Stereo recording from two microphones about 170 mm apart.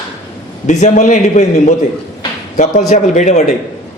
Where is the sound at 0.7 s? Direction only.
45° left (ahead or behind).